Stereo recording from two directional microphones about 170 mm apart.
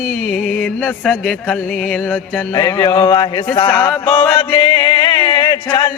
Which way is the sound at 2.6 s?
20° left (ahead or behind).